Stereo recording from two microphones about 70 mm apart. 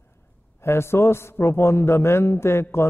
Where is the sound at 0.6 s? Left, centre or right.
Left.